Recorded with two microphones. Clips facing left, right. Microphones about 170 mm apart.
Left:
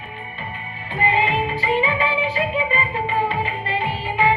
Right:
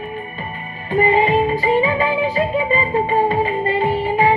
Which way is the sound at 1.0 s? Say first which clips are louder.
Right 5 dB; 45° right (ahead or behind).